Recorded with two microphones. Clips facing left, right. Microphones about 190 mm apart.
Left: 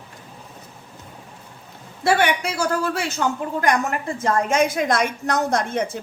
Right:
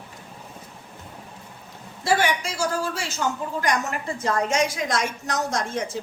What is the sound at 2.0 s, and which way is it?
A man's voice, 65° left (ahead or behind).